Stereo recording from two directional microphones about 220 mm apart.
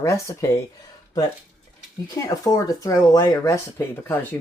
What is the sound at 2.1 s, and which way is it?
Speech, 15° left (ahead or behind).